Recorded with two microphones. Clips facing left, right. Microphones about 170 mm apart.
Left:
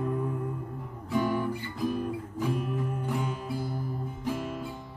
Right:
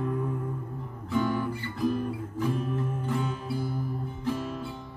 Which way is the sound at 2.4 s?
10° left (ahead or behind).